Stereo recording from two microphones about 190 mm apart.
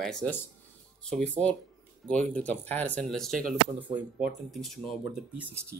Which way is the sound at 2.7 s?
10° left (ahead or behind).